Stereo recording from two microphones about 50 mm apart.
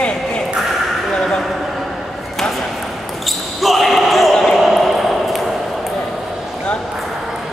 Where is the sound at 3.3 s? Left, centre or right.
Centre.